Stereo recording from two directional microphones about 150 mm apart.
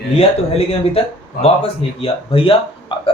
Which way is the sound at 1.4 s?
40° left (ahead or behind).